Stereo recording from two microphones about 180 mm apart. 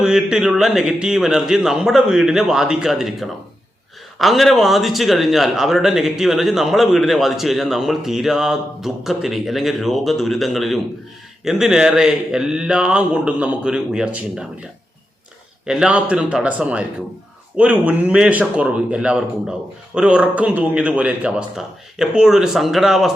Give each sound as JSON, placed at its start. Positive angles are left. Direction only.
{"t": 0.0, "sound": "speech", "side_deg": -5}
{"t": 15.6, "sound": "a man's voice", "side_deg": -5}